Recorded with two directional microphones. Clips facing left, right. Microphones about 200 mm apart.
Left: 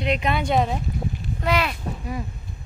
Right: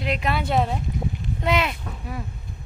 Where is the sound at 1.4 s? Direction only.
20° right (ahead or behind).